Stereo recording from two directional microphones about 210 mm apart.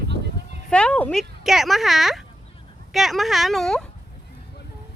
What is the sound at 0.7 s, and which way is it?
Speech, 5° left (ahead or behind).